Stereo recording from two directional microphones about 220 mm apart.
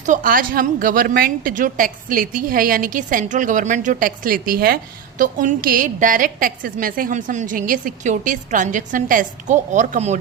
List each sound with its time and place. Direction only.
0.0 s a woman's voice: 35° right (ahead or behind)